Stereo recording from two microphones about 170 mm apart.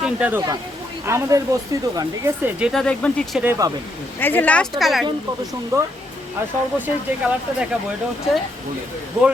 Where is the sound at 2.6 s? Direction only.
5° right (ahead or behind).